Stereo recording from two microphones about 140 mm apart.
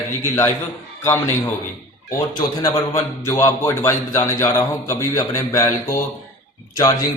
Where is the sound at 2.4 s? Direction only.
25° left (ahead or behind).